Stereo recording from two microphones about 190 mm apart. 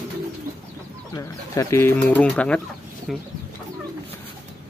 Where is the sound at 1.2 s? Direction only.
15° left (ahead or behind).